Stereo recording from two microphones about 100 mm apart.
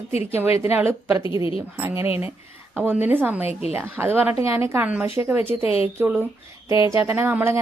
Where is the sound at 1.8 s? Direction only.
25° right (ahead or behind).